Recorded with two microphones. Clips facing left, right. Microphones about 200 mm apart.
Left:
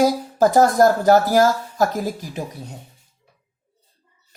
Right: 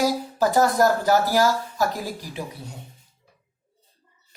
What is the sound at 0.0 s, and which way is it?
A woman's voice, 45° left (ahead or behind).